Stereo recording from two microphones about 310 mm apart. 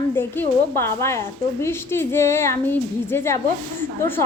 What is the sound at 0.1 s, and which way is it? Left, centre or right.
A woman's voice, centre.